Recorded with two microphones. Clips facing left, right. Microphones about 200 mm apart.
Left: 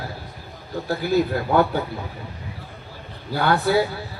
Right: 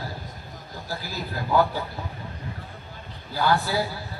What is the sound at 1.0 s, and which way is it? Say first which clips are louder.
Speech: left 16 dB; 65° left (ahead or behind).